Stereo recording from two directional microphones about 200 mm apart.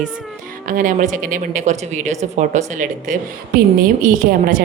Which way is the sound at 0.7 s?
40° right (ahead or behind).